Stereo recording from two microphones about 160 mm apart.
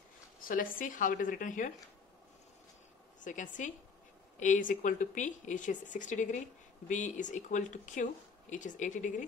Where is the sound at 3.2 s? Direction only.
55° left (ahead or behind).